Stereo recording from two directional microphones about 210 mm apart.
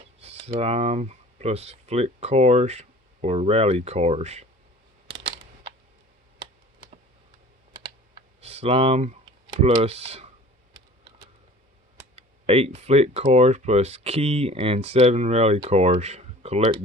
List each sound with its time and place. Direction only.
0.2 s speech: 30° right (ahead or behind)
8.4 s speech: 30° right (ahead or behind)
12.1 s speech: 30° right (ahead or behind)